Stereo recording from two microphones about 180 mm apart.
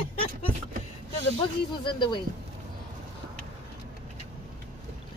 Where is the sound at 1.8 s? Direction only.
25° left (ahead or behind).